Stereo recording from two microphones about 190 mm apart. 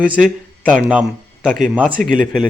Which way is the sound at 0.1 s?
5° left (ahead or behind).